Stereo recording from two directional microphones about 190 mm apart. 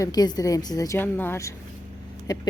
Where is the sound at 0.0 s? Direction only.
20° left (ahead or behind).